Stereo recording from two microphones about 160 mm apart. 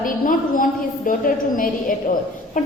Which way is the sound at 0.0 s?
60° left (ahead or behind).